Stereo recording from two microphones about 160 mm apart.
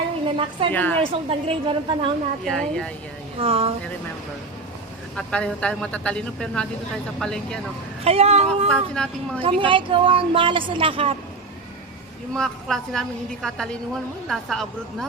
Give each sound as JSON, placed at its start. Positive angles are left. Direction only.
{"t": 0.3, "sound": "a sound", "side_deg": -35}
{"t": 0.7, "sound": "speech", "side_deg": 10}
{"t": 1.1, "sound": "a woman's voice", "side_deg": -35}
{"t": 2.4, "sound": "a woman's voice", "side_deg": 5}
{"t": 3.4, "sound": "a woman's voice", "side_deg": -40}
{"t": 5.1, "sound": "a woman's voice", "side_deg": 5}
{"t": 8.0, "sound": "a woman's voice", "side_deg": -40}
{"t": 8.7, "sound": "a woman's voice", "side_deg": 5}
{"t": 9.4, "sound": "a woman's voice", "side_deg": -30}
{"t": 12.3, "sound": "a woman's voice", "side_deg": 5}